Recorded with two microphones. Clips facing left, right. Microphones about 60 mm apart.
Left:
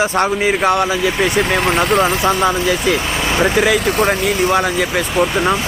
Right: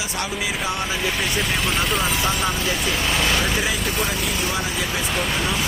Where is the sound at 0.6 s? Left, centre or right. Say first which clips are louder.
Left 10 dB; left.